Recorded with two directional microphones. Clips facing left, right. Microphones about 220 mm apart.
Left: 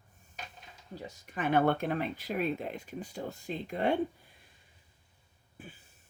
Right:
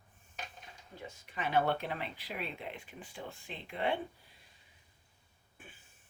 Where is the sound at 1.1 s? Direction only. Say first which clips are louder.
Left 7 dB; 45° left (ahead or behind).